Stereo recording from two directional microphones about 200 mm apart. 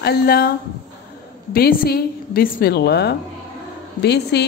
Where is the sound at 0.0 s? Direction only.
50° left (ahead or behind).